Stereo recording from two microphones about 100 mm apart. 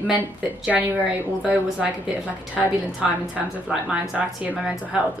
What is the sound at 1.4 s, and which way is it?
A woman's voice, 10° right (ahead or behind).